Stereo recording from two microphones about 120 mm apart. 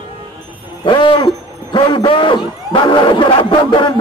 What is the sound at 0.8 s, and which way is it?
A man's voice, 45° left (ahead or behind).